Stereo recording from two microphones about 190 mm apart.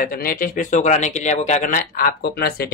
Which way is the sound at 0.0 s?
50° left (ahead or behind).